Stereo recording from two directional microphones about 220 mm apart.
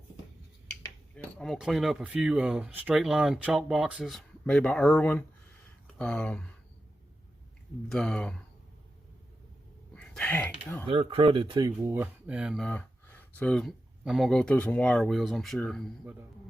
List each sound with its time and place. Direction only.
0.7 s cutlery: 5° left (ahead or behind)
7.9 s cutlery: 5° left (ahead or behind)
9.9 s speech: 5° left (ahead or behind)
10.8 s speech: 25° right (ahead or behind)
11.8 s cutlery: 10° right (ahead or behind)